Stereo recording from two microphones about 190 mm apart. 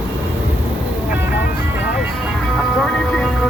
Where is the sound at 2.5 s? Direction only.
5° left (ahead or behind).